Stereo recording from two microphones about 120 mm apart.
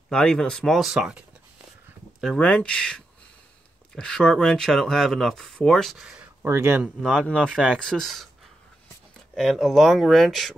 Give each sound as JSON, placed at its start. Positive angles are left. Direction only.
{"t": 0.1, "sound": "speech", "side_deg": 5}
{"t": 2.3, "sound": "speech", "side_deg": 10}
{"t": 6.4, "sound": "speech", "side_deg": -20}
{"t": 7.0, "sound": "speech", "side_deg": 5}
{"t": 9.3, "sound": "speech", "side_deg": 0}